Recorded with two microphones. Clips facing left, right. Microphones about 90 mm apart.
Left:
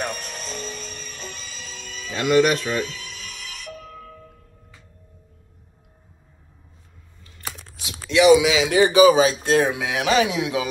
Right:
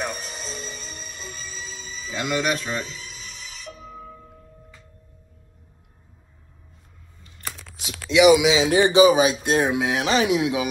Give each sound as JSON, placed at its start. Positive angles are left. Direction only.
{"t": 0.2, "sound": "music", "side_deg": 50}
{"t": 4.0, "sound": "tubular bells", "side_deg": -20}
{"t": 8.1, "sound": "speech", "side_deg": -10}
{"t": 8.5, "sound": "speech", "side_deg": -25}